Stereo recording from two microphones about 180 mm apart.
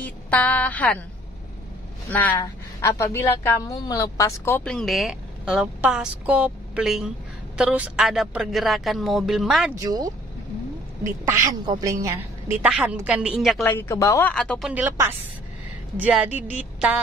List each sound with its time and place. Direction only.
0.0 s a woman's voice: 10° left (ahead or behind)
2.1 s a woman's voice: 10° left (ahead or behind)
9.8 s a woman's voice: 20° right (ahead or behind); by 13.7 s centre (ahead or behind)
13.7 s a woman's voice: 15° left (ahead or behind)
14.3 s a man's voice: 5° left (ahead or behind)
14.7 s a woman's voice: 10° right (ahead or behind)